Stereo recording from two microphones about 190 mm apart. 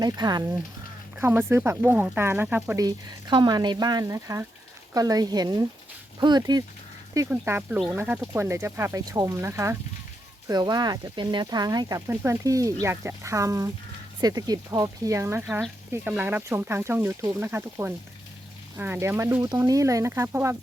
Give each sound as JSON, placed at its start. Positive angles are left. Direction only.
{"t": 0.0, "sound": "speech", "side_deg": -20}
{"t": 2.8, "sound": "speech", "side_deg": -20}